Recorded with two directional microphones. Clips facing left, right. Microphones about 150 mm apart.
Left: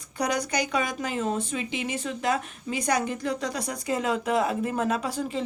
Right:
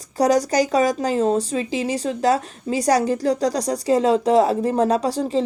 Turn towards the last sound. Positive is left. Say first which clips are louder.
# right 8 dB
turn(degrees=-35)  # may be behind; listen again after turning